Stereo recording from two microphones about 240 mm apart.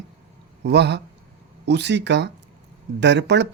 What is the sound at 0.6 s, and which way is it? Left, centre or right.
Speech, right.